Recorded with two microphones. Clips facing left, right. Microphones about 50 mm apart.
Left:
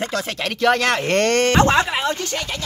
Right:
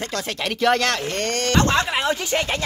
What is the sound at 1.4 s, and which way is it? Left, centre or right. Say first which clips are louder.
Speech: even; left.